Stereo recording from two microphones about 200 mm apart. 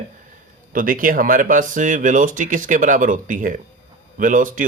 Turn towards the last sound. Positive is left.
turn(degrees=-40)  # may be behind; listen again after turning